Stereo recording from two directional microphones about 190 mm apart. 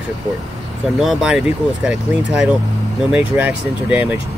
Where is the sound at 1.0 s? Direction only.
5° right (ahead or behind).